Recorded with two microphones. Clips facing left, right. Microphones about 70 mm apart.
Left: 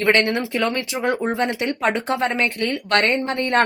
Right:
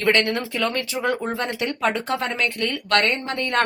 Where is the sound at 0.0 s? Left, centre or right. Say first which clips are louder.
Left 2 dB; left.